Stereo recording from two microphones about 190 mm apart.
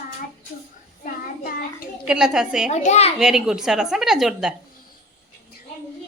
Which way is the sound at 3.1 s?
5° right (ahead or behind).